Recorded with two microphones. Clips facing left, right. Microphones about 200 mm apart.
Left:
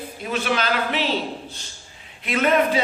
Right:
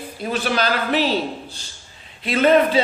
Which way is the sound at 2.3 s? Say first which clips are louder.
Right 4 dB; 30° right (ahead or behind).